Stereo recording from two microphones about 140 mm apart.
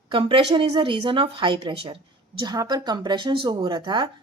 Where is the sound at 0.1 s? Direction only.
35° right (ahead or behind).